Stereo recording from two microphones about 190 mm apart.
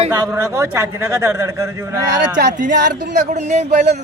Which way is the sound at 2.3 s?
45° right (ahead or behind).